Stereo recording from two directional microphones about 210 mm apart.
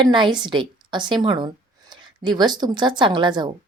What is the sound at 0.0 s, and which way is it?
A woman's voice, 20° right (ahead or behind).